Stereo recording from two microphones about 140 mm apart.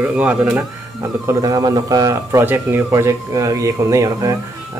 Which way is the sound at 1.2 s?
25° right (ahead or behind).